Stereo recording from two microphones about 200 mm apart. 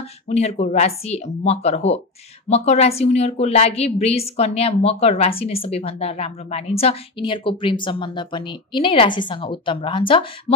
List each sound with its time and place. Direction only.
0.3 s a woman's voice: 35° left (ahead or behind)